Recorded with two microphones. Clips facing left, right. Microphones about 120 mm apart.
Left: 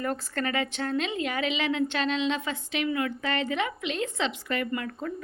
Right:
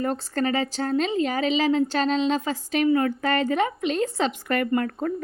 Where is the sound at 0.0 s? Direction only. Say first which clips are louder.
Right 5 dB; 30° right (ahead or behind).